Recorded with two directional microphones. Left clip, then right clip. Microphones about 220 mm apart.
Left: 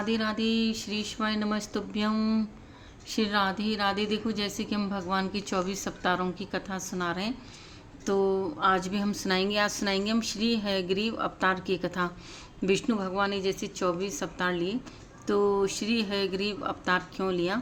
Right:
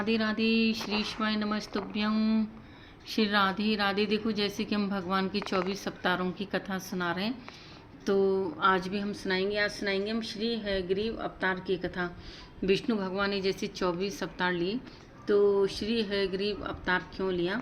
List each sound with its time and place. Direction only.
0.0 s a woman's voice: centre (ahead or behind)
8.9 s a woman's voice: 20° left (ahead or behind)
15.3 s speech: 15° left (ahead or behind)